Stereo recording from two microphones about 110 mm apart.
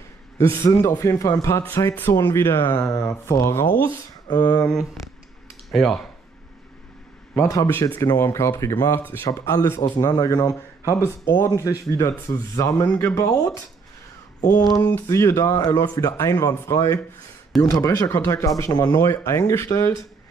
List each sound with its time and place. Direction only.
0.4 s speech: 25° left (ahead or behind)
3.8 s speech: 35° left (ahead or behind)
4.7 s speech: centre (ahead or behind)
7.3 s speech: 25° left (ahead or behind)
14.8 s speech: 20° left (ahead or behind)
18.7 s speech: 40° left (ahead or behind)